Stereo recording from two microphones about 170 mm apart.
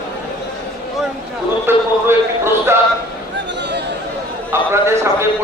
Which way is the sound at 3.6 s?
90° right.